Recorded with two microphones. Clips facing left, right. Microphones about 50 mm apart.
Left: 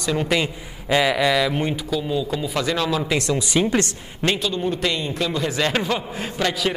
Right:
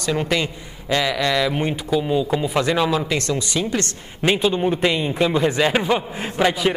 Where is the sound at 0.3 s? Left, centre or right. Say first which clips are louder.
Even; centre.